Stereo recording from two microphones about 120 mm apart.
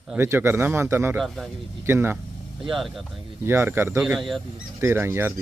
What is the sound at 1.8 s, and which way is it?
Speech, 20° right (ahead or behind).